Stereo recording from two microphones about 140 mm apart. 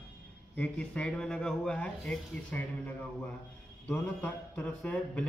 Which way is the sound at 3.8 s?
10° left (ahead or behind).